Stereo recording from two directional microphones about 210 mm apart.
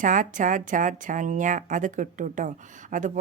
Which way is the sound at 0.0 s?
40° right (ahead or behind).